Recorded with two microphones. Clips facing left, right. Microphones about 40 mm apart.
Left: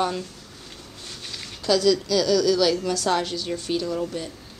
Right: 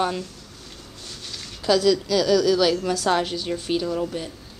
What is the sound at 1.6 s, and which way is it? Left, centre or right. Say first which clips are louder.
A woman's voice: right 1 dB; centre.